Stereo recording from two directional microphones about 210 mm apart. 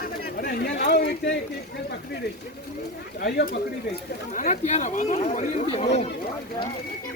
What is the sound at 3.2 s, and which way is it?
Speech, 50° left (ahead or behind).